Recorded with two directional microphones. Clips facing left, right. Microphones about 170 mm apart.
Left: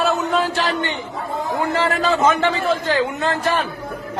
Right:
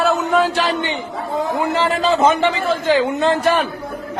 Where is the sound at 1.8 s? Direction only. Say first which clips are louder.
Right 2 dB; 25° right (ahead or behind).